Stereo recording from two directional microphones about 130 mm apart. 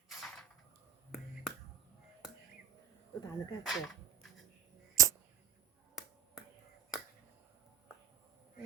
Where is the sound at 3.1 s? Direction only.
25° left (ahead or behind).